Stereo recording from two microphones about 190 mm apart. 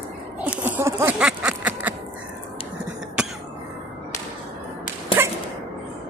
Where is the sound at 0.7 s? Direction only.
10° right (ahead or behind).